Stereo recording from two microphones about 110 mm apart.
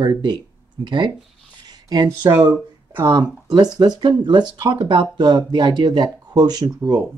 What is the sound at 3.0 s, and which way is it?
Speech, 40° right (ahead or behind).